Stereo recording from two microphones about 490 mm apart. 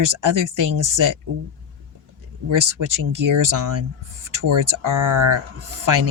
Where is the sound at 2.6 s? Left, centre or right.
Right.